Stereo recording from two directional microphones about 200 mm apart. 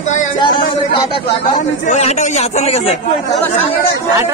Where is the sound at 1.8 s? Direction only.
35° left (ahead or behind).